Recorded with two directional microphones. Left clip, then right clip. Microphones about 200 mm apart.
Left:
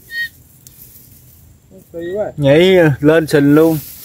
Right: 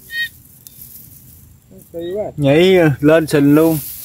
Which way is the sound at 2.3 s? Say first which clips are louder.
Left 2 dB; 5° right (ahead or behind).